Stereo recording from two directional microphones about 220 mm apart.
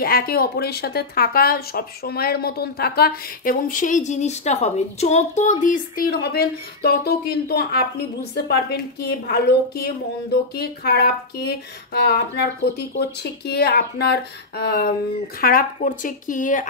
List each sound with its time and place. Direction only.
0.0 s speech: 40° left (ahead or behind)